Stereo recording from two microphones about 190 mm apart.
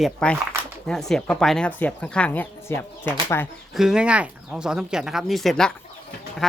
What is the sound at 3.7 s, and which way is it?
Speech, 5° right (ahead or behind).